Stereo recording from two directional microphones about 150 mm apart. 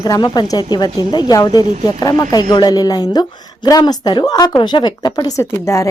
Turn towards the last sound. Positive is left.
turn(degrees=20)  # may be behind; listen again after turning